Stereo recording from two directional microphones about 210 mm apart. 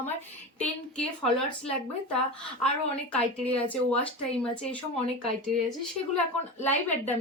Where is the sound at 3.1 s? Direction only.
5° left (ahead or behind).